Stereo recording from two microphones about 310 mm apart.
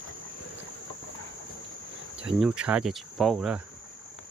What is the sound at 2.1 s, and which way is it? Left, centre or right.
Cricket, centre.